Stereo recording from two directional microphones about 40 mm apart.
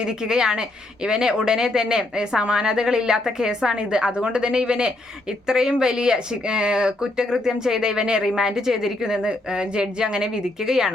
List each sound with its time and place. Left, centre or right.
0.0 s a woman's voice: centre